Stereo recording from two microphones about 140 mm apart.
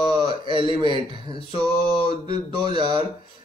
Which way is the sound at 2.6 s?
35° right (ahead or behind).